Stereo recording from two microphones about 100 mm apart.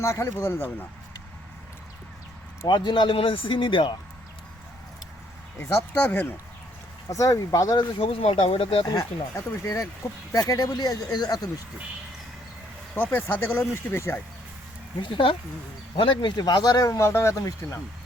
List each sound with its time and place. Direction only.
0.0 s speech: 30° left (ahead or behind)
2.6 s speech: 50° left (ahead or behind)
5.9 s speech: 20° left (ahead or behind)
7.1 s speech: 35° left (ahead or behind)
7.9 s speech: 70° left (ahead or behind)
8.9 s speech: 35° left (ahead or behind)
10.3 s speech: 40° left (ahead or behind)
12.9 s speech: 20° left (ahead or behind)
15.0 s speech: 55° left (ahead or behind); by 17.7 s 30° left (ahead or behind)